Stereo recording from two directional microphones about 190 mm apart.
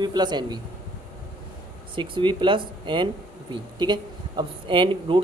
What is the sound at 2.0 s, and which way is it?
Speech, 25° right (ahead or behind).